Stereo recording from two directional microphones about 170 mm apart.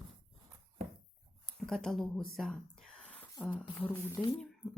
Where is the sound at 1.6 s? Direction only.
Centre (ahead or behind).